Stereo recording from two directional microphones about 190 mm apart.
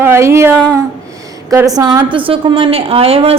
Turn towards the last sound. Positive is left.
turn(degrees=-30)  # may be behind; listen again after turning